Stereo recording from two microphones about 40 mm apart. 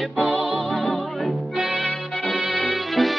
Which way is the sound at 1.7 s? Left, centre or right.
Left.